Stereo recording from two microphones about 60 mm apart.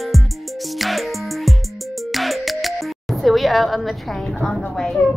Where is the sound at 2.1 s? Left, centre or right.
Centre.